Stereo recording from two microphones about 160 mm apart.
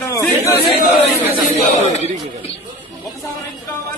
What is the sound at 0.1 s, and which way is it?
Chatter, 15° left (ahead or behind).